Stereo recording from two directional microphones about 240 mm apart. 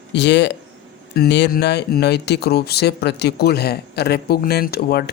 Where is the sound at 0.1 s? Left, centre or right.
Left.